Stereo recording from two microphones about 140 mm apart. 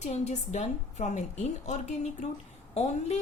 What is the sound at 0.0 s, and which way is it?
A woman's voice, 55° left (ahead or behind).